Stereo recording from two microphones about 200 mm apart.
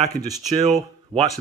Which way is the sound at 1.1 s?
25° right (ahead or behind).